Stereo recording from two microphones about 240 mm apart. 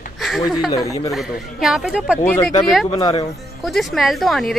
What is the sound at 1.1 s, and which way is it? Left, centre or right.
A woman's voice, centre.